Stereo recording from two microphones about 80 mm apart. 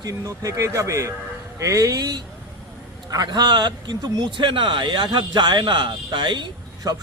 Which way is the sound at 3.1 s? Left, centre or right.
Right.